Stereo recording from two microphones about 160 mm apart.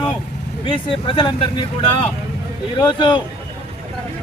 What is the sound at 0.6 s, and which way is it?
Speech, 35° left (ahead or behind).